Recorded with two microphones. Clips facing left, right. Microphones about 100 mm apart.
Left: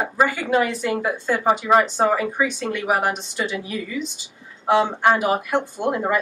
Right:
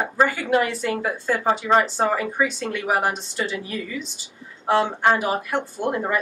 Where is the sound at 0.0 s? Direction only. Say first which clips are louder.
Even; 15° left (ahead or behind).